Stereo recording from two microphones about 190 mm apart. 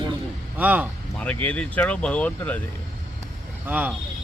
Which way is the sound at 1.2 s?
10° left (ahead or behind).